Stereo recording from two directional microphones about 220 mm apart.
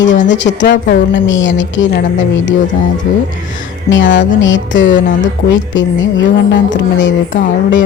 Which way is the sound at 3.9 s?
55° left (ahead or behind).